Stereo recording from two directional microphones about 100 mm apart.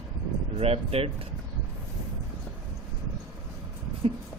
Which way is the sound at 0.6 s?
80° right.